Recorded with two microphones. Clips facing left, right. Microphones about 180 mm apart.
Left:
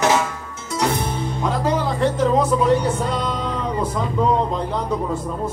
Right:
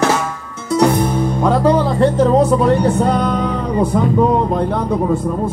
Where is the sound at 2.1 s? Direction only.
60° right (ahead or behind).